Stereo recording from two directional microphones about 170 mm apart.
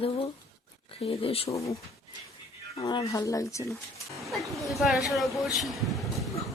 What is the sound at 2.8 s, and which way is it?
Speech, 25° left (ahead or behind).